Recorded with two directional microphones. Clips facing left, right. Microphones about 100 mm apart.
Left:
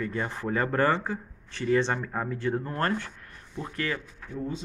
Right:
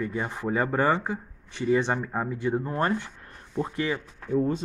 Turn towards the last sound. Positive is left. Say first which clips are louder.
# right 9 dB
turn(degrees=-50)  # may be behind; listen again after turning